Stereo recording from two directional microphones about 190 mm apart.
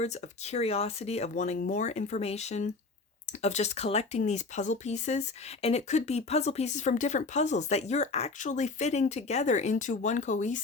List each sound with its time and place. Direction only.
0.0 s speech: 35° left (ahead or behind)